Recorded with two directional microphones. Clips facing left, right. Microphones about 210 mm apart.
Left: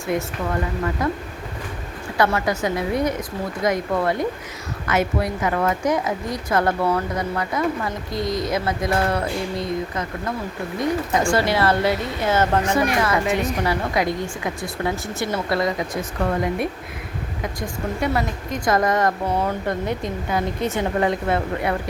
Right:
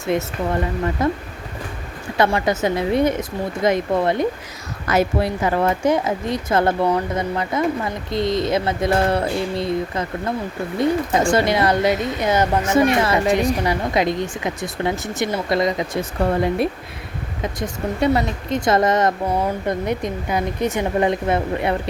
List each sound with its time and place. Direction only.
0.0 s a woman's voice: 25° right (ahead or behind)
4.9 s a woman's voice: 35° right (ahead or behind); by 12.8 s 15° right (ahead or behind)
12.8 s a woman's voice: 25° right (ahead or behind)
16.2 s a woman's voice: 30° right (ahead or behind)